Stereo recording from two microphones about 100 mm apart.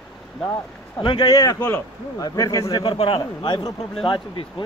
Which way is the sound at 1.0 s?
50° left (ahead or behind).